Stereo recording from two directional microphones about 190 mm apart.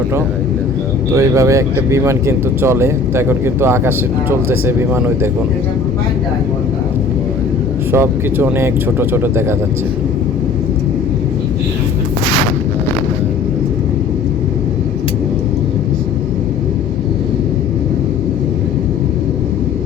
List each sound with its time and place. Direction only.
1.1 s speech: 15° right (ahead or behind)
7.9 s speech: 10° right (ahead or behind)